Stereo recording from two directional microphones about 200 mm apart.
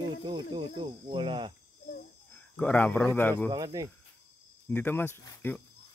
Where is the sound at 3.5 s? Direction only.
20° right (ahead or behind).